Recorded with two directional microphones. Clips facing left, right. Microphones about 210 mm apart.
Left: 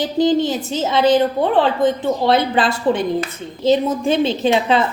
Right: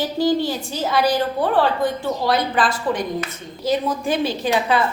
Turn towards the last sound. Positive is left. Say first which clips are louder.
# left 4 dB
turn(degrees=25)  # may be behind; listen again after turning